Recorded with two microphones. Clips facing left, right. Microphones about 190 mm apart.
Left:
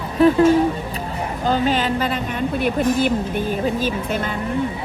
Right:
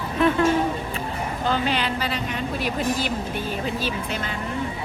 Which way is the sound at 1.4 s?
40° left (ahead or behind).